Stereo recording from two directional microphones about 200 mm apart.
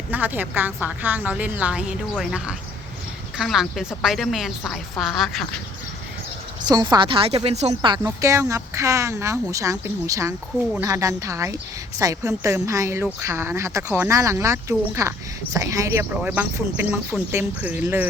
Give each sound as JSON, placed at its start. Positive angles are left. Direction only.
{"t": 0.1, "sound": "a woman's voice", "side_deg": -10}
{"t": 6.6, "sound": "speech", "side_deg": -20}